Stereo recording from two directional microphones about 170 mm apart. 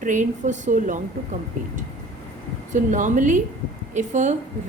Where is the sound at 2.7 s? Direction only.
45° right (ahead or behind).